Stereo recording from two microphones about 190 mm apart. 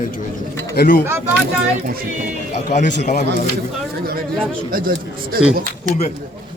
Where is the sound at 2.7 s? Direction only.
40° left (ahead or behind).